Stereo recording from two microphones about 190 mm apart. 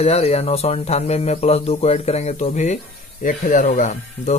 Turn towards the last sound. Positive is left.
turn(degrees=40)  # may be behind; listen again after turning